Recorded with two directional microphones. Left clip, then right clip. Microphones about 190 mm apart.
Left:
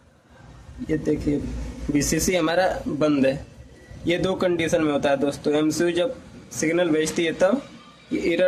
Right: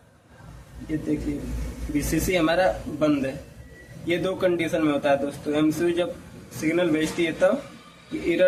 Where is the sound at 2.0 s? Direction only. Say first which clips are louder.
Left 1 dB; 50° left (ahead or behind).